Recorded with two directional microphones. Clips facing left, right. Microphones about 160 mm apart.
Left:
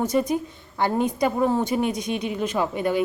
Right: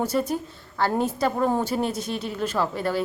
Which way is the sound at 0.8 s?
20° left (ahead or behind).